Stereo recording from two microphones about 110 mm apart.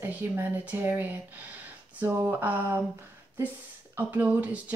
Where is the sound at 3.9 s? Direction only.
15° right (ahead or behind).